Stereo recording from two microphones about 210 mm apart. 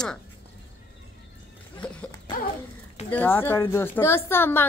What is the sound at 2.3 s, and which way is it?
Dog, 20° left (ahead or behind).